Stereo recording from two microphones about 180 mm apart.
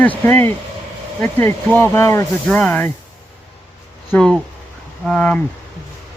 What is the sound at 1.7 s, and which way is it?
Speech, 15° left (ahead or behind).